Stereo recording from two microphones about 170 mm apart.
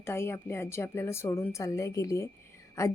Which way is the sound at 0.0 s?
15° left (ahead or behind).